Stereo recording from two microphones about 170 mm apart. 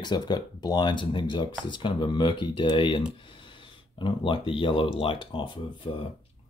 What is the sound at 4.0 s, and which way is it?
Speech, 30° left (ahead or behind).